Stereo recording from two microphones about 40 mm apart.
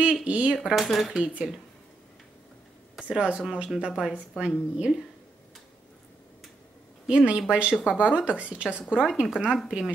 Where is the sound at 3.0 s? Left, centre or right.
Right.